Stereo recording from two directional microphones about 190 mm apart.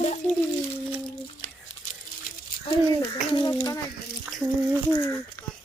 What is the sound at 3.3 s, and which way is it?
Speech, 25° left (ahead or behind).